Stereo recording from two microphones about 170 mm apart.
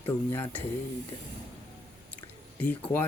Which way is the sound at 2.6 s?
10° left (ahead or behind).